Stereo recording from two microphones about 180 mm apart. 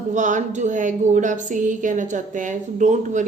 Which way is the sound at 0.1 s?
45° right (ahead or behind).